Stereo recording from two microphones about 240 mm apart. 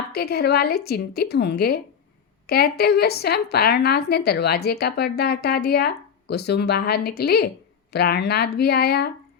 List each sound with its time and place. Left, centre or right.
0.1 s speech: left